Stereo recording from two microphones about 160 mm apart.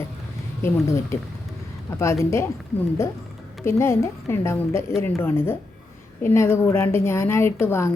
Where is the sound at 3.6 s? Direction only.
15° left (ahead or behind).